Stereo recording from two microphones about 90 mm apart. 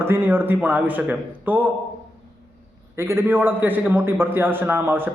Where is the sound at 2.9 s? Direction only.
30° right (ahead or behind).